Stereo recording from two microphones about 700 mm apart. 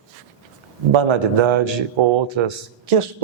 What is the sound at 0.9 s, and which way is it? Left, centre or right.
Speech, right.